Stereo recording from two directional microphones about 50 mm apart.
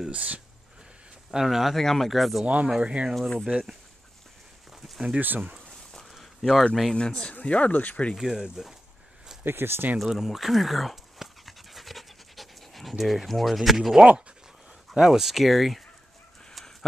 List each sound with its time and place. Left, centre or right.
0.1 s speech: right
1.3 s speech: centre
1.8 s speech: centre
2.4 s speech: right
3.2 s speech: centre
5.2 s speech: right
5.9 s a sound: centre
7.0 s speech: centre
8.2 s speech: centre
9.4 s speech: right
10.0 s dog: centre
13.9 s speech: centre
15.0 s speech: centre